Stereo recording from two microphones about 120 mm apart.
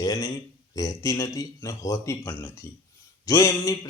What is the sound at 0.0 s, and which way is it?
Speech, 30° left (ahead or behind).